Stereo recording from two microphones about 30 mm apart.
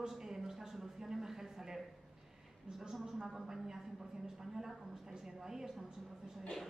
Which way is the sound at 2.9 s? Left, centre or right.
Centre.